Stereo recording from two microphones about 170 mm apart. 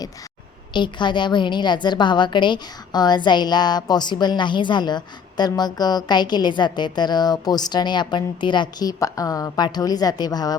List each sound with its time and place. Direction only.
0.7 s a woman's voice: 25° left (ahead or behind)